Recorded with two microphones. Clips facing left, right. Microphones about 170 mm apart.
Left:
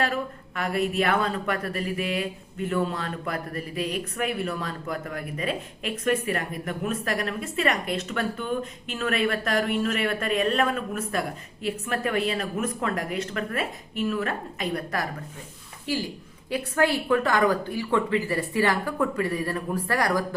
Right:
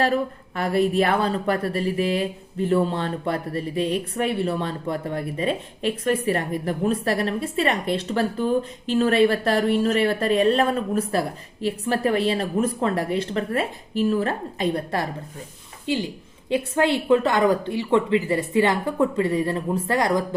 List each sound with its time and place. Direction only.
0.0 s a woman's voice: 35° right (ahead or behind)